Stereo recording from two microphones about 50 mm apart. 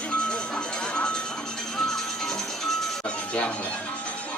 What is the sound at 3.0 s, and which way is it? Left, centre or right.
Music, left.